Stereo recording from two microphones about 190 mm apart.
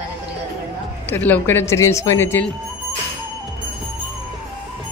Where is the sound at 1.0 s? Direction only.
10° left (ahead or behind).